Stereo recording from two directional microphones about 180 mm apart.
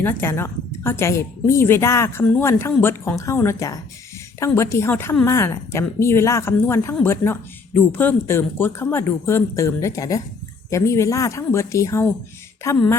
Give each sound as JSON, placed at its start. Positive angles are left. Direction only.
{"t": 0.0, "sound": "a woman's voice", "side_deg": 10}